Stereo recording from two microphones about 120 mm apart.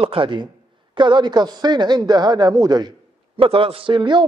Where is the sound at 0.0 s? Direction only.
45° right (ahead or behind); by 2.9 s 30° right (ahead or behind).